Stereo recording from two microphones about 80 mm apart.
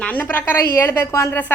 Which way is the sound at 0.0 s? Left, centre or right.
Left.